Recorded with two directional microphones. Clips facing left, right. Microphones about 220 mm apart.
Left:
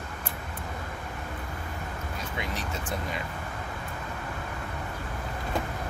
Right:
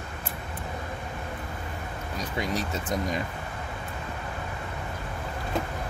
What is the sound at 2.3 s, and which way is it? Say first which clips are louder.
Speech: right 6 dB; 40° right (ahead or behind).